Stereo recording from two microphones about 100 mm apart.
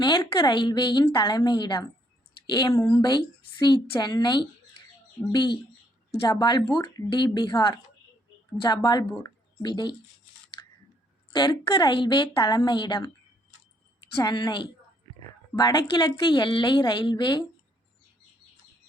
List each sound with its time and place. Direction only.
0.0 s a woman's voice: 45° left (ahead or behind)
9.1 s a sound: 35° left (ahead or behind)
9.6 s a woman's voice: 50° left (ahead or behind)
11.3 s a woman's voice: 45° left (ahead or behind)
11.7 s a woman's voice: 55° left (ahead or behind)